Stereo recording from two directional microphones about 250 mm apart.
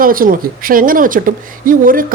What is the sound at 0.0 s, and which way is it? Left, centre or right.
A woman's voice, right.